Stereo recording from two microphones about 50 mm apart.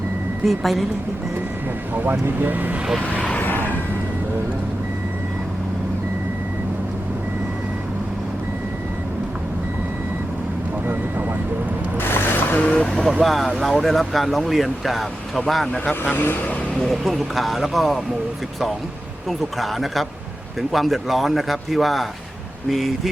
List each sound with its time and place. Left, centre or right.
0.4 s speech: centre
2.0 s speech: right
3.4 s a sound: left
11.9 s boat: left
12.9 s speech: centre
15.7 s speech: left
16.1 s speech: left
16.8 s speech: centre
19.3 s speech: centre